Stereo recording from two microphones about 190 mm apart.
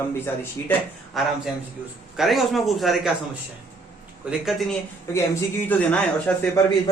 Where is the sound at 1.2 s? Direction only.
Centre (ahead or behind).